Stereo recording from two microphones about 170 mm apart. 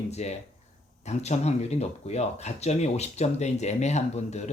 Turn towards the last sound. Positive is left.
turn(degrees=40)  # may be behind; listen again after turning